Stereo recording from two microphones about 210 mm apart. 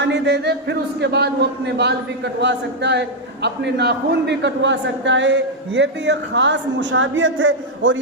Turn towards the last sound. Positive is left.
turn(degrees=-65)  # may be behind; listen again after turning